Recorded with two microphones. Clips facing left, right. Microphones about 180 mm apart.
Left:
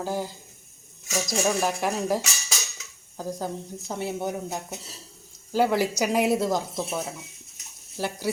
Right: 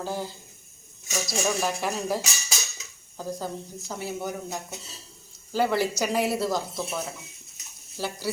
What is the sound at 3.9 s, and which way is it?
Cutlery, 25° left (ahead or behind).